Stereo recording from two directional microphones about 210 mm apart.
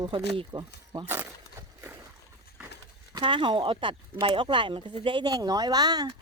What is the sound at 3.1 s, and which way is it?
Speech, 25° right (ahead or behind).